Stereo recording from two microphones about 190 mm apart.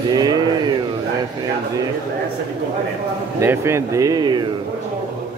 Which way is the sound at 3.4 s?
15° right (ahead or behind).